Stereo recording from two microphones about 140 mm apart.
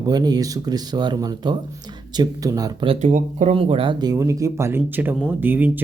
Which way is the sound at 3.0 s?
65° right (ahead or behind).